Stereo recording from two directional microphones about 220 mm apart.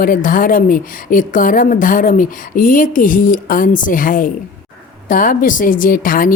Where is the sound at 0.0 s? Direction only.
40° left (ahead or behind).